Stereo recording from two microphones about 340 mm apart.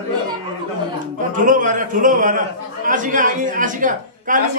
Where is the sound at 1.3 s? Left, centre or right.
Right.